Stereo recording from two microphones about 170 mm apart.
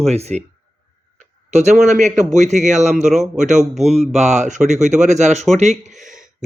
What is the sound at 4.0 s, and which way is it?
Speech, 40° right (ahead or behind).